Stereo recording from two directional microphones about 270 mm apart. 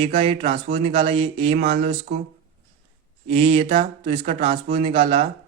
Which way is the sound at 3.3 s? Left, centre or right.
Right.